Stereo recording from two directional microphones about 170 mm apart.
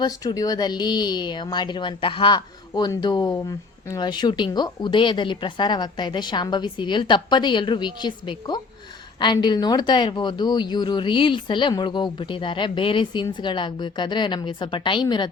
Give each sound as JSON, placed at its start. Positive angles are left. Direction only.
{"t": 0.0, "sound": "speech", "side_deg": 25}